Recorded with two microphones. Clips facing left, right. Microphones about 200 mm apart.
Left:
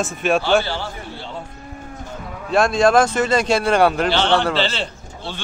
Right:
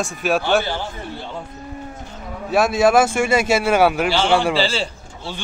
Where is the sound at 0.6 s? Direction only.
15° right (ahead or behind).